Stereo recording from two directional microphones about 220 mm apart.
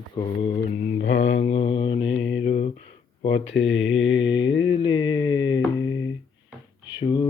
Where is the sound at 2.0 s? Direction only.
55° left (ahead or behind).